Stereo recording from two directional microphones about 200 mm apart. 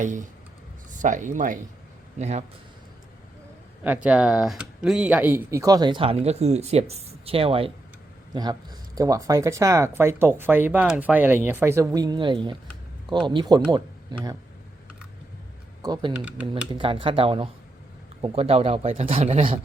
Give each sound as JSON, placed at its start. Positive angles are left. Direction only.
{"t": 0.0, "sound": "a man's voice", "side_deg": -40}
{"t": 3.8, "sound": "speech", "side_deg": -5}
{"t": 15.8, "sound": "speech", "side_deg": -20}
{"t": 16.1, "sound": "speech", "side_deg": -5}
{"t": 16.7, "sound": "speech", "side_deg": -25}